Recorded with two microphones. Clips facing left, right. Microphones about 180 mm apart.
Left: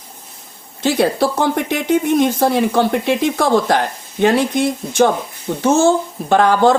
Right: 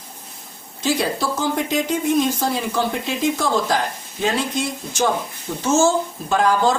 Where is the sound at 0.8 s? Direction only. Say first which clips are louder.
Left 6 dB; 60° left (ahead or behind).